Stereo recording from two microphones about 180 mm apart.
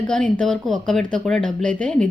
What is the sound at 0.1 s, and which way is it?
A woman's voice, 5° left (ahead or behind).